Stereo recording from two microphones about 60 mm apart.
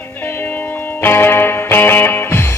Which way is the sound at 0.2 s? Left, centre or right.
Left.